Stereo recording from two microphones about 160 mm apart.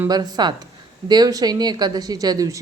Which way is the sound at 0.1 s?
25° right (ahead or behind).